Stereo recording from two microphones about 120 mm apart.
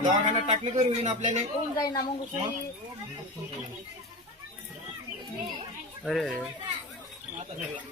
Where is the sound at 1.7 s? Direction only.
30° left (ahead or behind).